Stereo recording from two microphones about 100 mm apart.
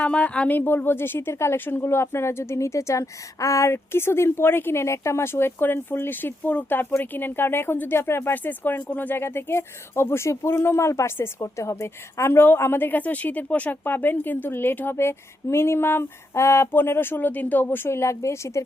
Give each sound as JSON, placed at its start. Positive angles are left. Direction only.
{"t": 0.0, "sound": "a woman's voice", "side_deg": 10}